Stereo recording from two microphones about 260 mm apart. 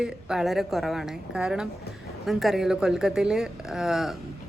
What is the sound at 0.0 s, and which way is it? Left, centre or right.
Speech, centre.